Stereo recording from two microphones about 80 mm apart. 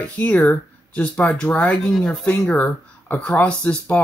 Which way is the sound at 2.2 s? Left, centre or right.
Centre.